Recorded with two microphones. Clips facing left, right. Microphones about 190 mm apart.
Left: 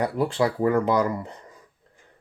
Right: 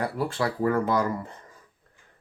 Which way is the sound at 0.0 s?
20° left (ahead or behind).